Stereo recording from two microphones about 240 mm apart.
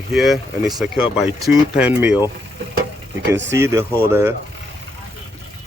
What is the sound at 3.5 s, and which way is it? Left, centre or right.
Speech, centre.